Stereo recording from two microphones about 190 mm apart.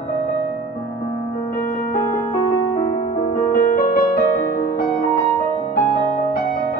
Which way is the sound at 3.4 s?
50° left (ahead or behind).